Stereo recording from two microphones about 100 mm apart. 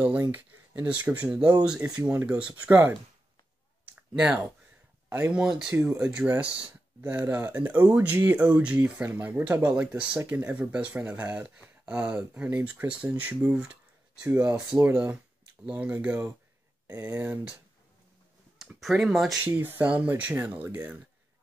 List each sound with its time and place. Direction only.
0.3 s speech: 15° right (ahead or behind)
3.9 s a sound: 10° right (ahead or behind)
5.3 s speech: 10° right (ahead or behind)
18.6 s speech: centre (ahead or behind)
19.4 s speech: 20° right (ahead or behind)